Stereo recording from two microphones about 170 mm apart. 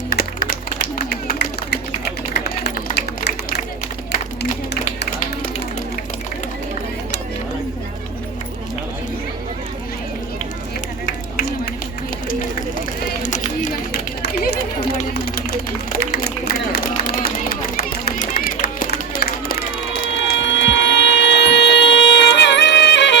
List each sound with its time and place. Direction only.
0.1 s music: 65° left (ahead or behind)
2.4 s a sound: 70° left (ahead or behind)
4.1 s music: 60° left (ahead or behind)
11.0 s run: 60° left (ahead or behind)
13.2 s run: 50° left (ahead or behind)
14.2 s run: 70° left (ahead or behind)
15.9 s run: 65° left (ahead or behind)
18.8 s a sound: 60° left (ahead or behind); by 23.1 s 90° left